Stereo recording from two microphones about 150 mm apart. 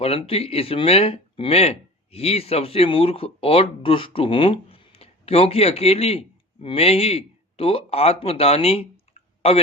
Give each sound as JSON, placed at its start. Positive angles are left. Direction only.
{"t": 0.0, "sound": "speech", "side_deg": 40}